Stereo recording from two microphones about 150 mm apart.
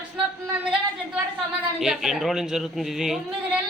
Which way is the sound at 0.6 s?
5° right (ahead or behind).